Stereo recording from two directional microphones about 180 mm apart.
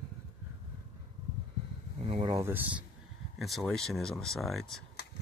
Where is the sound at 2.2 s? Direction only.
15° right (ahead or behind).